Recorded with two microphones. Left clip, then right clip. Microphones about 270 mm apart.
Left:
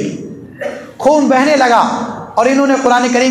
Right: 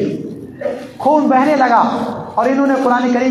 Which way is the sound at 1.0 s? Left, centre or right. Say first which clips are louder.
Left 2 dB; left.